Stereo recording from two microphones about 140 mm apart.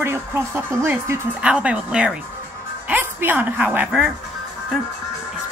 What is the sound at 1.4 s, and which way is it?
A woman's voice, 10° right (ahead or behind).